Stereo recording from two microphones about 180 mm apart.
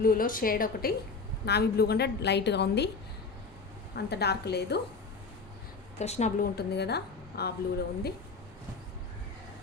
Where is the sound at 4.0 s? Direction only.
65° left (ahead or behind).